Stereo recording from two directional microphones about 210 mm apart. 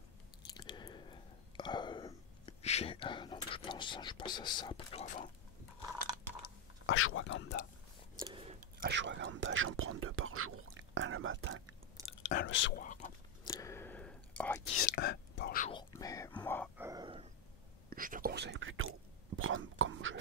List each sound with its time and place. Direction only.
0.6 s whispering: 20° left (ahead or behind)
5.0 s speech: 35° left (ahead or behind)
6.9 s speech: 70° left (ahead or behind); by 7.6 s 55° left (ahead or behind)
8.2 s chewing: 25° right (ahead or behind)
8.8 s speech: 60° right (ahead or behind)
12.0 s whispering: 15° right (ahead or behind)
12.4 s speech: 60° left (ahead or behind)
12.8 s whispering: 35° left (ahead or behind)
13.4 s whispering: 15° left (ahead or behind)
15.0 s whispering: 50° left (ahead or behind)
15.7 s whispering: 20° left (ahead or behind)
16.4 s a sound: 10° left (ahead or behind)
16.7 s a sound: 15° right (ahead or behind)
17.8 s whispering: 40° right (ahead or behind); by 20.2 s 65° right (ahead or behind)